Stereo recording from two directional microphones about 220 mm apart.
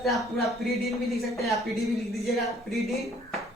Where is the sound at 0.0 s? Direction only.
Centre (ahead or behind).